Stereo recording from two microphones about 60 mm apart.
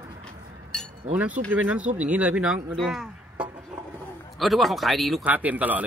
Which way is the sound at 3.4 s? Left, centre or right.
Centre.